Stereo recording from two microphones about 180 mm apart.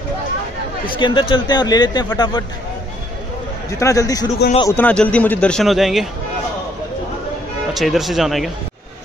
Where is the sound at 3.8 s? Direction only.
20° left (ahead or behind).